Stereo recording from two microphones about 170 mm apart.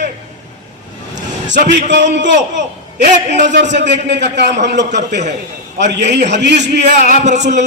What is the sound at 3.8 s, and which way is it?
A man's voice, 90° right.